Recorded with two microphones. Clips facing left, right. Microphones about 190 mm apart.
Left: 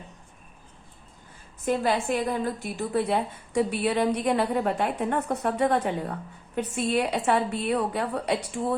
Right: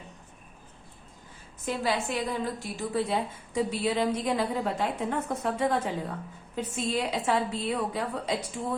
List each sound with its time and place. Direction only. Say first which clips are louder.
1.6 s a woman's voice: left 4 dB; 55° left (ahead or behind)